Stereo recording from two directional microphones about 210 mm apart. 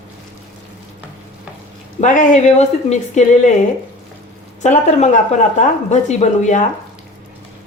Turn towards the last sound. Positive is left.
turn(degrees=35)  # may be behind; listen again after turning